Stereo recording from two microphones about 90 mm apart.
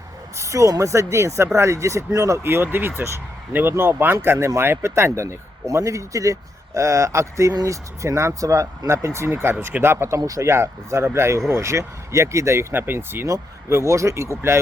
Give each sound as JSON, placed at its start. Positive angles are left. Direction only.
{"t": 0.3, "sound": "speech", "side_deg": -35}
{"t": 10.2, "sound": "speech", "side_deg": -40}